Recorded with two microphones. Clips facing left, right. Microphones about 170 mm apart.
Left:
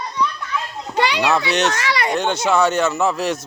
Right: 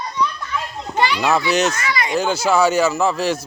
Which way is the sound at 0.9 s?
75° left (ahead or behind).